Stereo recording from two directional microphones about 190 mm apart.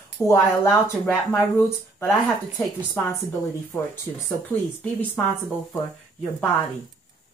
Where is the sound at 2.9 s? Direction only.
10° left (ahead or behind).